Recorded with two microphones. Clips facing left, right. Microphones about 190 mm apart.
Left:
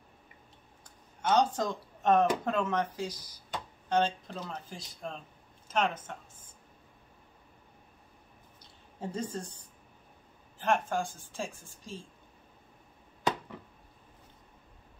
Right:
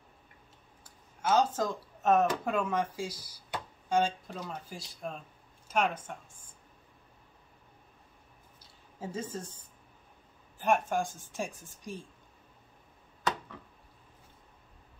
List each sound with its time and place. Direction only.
0.8 s a sound: 5° right (ahead or behind)
2.4 s a woman's voice: 10° right (ahead or behind)
9.0 s speech: 5° right (ahead or behind)
10.6 s a woman's voice: 15° right (ahead or behind)